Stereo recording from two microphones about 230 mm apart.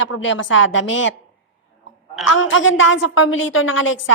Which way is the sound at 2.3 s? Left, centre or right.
Left.